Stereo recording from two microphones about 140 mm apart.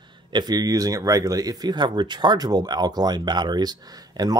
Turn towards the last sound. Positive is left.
turn(degrees=-25)  # may be behind; listen again after turning